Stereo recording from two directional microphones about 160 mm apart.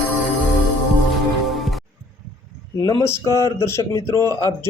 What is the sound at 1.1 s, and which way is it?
Music, centre (ahead or behind).